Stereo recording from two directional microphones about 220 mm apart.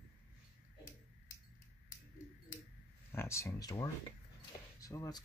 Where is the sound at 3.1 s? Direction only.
10° left (ahead or behind).